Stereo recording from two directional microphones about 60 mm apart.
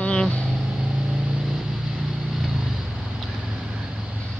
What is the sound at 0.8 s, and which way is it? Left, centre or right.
Vehicle, centre.